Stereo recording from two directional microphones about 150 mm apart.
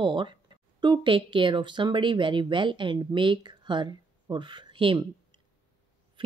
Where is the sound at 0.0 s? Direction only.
30° right (ahead or behind).